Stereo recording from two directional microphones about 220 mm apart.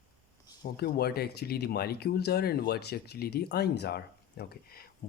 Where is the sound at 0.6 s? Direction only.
45° left (ahead or behind).